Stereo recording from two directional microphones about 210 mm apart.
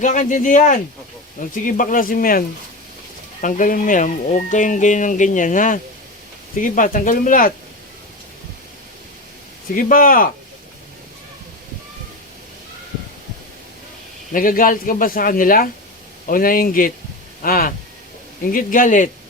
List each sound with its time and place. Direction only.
0.0 s speech: 35° left (ahead or behind)
3.4 s speech: 40° left (ahead or behind)
9.7 s speech: 40° left (ahead or behind)
14.3 s a man's voice: 40° left (ahead or behind)